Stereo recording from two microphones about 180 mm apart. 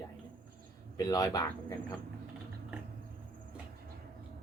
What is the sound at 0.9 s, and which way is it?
Speech, 20° left (ahead or behind).